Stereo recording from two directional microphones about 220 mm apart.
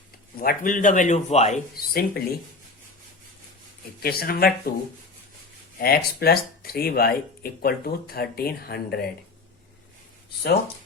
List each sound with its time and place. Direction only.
0.3 s speech: 40° left (ahead or behind)
4.0 s speech: 45° left (ahead or behind)
5.8 s speech: 45° left (ahead or behind)